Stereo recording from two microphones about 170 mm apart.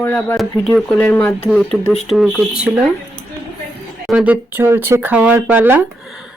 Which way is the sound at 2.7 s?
15° right (ahead or behind).